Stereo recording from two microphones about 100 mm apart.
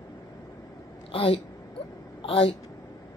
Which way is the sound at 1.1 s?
70° left (ahead or behind).